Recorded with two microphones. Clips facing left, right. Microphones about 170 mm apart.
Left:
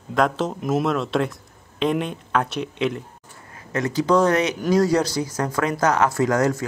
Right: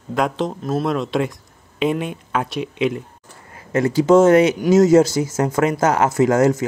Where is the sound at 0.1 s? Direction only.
Centre (ahead or behind).